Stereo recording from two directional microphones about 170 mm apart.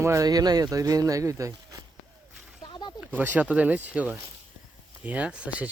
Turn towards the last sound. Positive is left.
turn(degrees=-5)  # may be behind; listen again after turning